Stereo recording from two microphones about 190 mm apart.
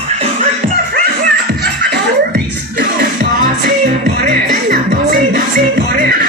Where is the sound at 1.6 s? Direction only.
60° right (ahead or behind).